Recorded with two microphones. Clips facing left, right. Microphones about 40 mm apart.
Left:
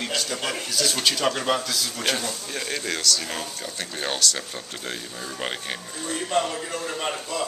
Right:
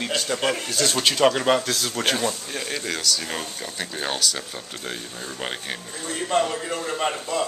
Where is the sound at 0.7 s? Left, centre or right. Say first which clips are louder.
Right 2 dB; right.